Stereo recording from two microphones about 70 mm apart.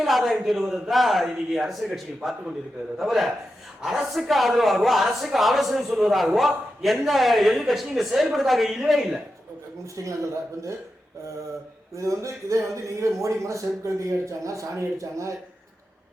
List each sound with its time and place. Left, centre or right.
0.0 s speech: centre
3.0 s speech: centre
9.8 s speech: right
11.9 s speech: right